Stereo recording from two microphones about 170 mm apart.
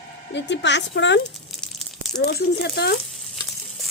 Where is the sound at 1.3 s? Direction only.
Centre (ahead or behind).